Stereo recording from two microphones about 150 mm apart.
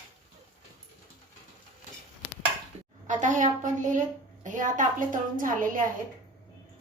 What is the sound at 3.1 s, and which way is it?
A woman's voice, 55° right (ahead or behind).